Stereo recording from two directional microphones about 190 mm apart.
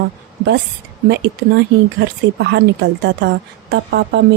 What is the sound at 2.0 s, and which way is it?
Speech, 60° right (ahead or behind).